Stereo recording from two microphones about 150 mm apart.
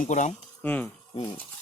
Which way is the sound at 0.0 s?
55° left (ahead or behind).